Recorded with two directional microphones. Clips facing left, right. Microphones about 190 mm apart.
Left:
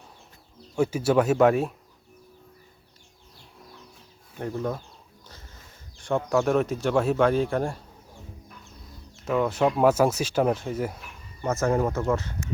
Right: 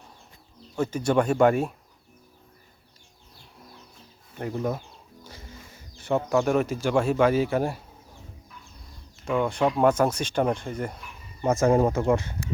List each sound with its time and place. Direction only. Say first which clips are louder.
0.8 s speech: left 2 dB; 10° left (ahead or behind)
4.4 s speech: right 1 dB; 5° right (ahead or behind)
5.2 s a sound: right 6 dB; 10° right (ahead or behind)
6.0 s speech: right 1 dB; 5° right (ahead or behind)
9.2 s speech: left 1 dB; 5° left (ahead or behind)
11.4 s speech: right 3 dB; 15° right (ahead or behind)